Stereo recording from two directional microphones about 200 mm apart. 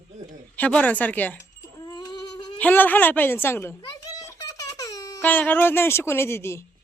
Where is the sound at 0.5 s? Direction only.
10° left (ahead or behind).